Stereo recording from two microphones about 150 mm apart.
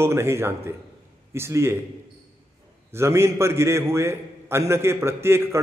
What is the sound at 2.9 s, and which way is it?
A man's voice, 15° right (ahead or behind).